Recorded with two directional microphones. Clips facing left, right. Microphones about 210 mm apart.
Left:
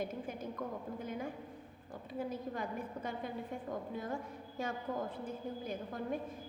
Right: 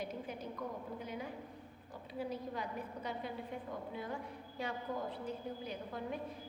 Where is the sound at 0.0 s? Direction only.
50° left (ahead or behind).